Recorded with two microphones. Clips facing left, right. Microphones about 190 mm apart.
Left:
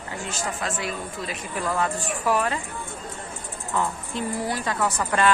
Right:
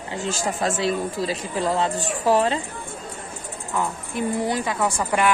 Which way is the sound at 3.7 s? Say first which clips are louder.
Right 1 dB; 20° right (ahead or behind).